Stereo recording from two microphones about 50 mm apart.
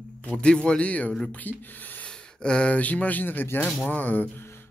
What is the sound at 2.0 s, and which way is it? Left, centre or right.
Speech, centre.